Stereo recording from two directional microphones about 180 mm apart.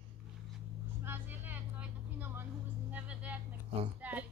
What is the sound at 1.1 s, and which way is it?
Vehicle, 10° right (ahead or behind).